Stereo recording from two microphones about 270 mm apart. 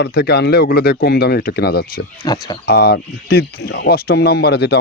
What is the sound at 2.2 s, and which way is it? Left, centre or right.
Speech, centre.